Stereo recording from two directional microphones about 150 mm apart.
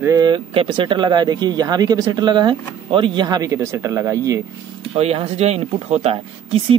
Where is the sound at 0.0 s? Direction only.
25° right (ahead or behind).